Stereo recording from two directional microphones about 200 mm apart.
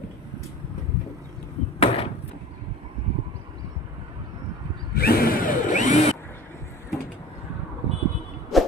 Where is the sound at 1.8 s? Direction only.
30° left (ahead or behind).